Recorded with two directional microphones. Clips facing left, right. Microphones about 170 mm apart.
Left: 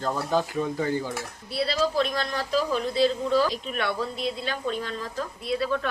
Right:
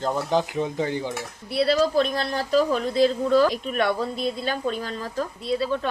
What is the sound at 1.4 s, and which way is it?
Speech, 55° right (ahead or behind).